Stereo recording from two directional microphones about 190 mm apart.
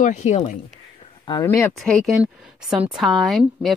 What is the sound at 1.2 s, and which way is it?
Speech, 20° left (ahead or behind).